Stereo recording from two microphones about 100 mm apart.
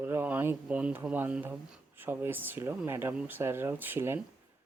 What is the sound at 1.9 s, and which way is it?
Speech, 20° right (ahead or behind).